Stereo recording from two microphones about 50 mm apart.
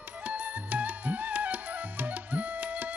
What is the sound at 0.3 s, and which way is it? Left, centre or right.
Music, right.